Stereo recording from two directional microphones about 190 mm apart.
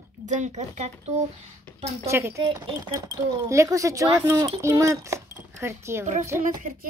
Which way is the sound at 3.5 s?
15° right (ahead or behind).